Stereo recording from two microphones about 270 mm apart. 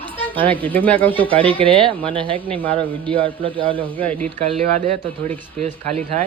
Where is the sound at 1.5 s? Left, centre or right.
Centre.